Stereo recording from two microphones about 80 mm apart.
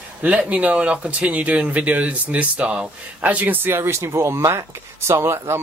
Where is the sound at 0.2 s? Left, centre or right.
Centre.